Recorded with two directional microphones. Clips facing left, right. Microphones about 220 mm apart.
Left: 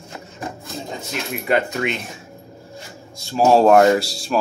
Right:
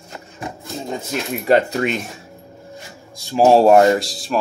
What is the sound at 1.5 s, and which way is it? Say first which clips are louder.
Speech: right 4 dB; 35° right (ahead or behind).